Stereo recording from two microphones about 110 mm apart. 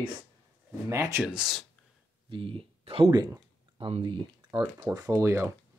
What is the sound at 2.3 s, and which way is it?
Speech, 55° right (ahead or behind).